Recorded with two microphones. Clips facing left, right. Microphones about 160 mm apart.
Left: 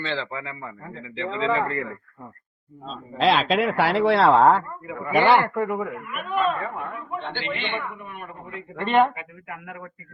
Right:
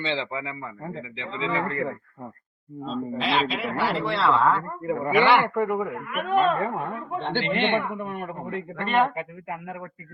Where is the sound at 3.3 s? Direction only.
80° left; by 4.5 s 50° left (ahead or behind).